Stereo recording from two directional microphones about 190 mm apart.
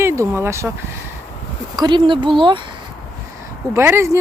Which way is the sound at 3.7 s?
15° right (ahead or behind).